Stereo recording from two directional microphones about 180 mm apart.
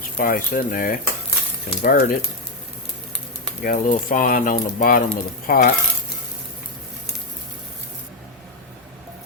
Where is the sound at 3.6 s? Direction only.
50° left (ahead or behind).